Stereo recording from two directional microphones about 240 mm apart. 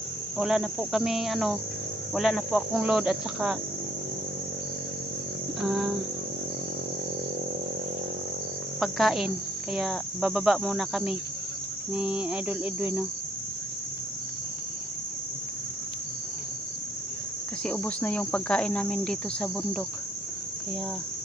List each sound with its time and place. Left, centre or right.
0.3 s cricket: centre
5.6 s cricket: centre
8.8 s cricket: centre
17.6 s cricket: centre